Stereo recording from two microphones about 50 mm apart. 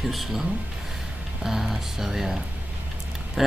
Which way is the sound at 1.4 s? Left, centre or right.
Centre.